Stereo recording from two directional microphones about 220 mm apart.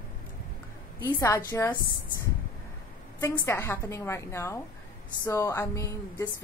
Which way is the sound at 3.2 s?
10° left (ahead or behind).